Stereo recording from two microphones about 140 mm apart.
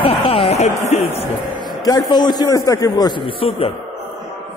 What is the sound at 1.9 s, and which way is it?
A man's voice, 30° left (ahead or behind).